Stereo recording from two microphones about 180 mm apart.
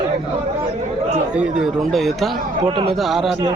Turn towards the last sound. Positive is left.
turn(degrees=0)  # may be behind; listen again after turning